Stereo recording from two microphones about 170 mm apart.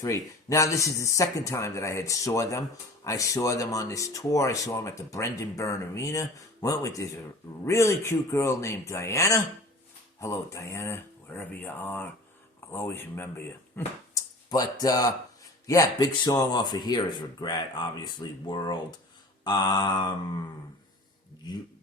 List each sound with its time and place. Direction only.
0.0 s speech: 20° left (ahead or behind)